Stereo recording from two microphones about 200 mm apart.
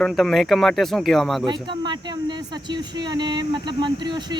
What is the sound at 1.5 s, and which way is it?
Speech, 20° right (ahead or behind).